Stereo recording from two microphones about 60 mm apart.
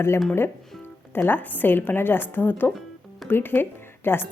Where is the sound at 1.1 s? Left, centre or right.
Left.